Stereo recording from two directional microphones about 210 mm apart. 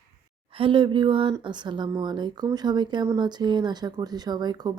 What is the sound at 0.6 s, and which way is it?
Speech, 25° right (ahead or behind).